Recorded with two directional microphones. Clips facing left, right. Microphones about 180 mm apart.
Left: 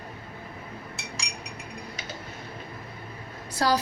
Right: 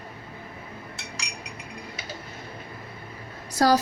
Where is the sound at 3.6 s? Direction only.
45° right (ahead or behind).